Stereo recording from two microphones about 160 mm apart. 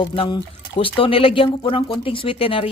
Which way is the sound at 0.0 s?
30° left (ahead or behind).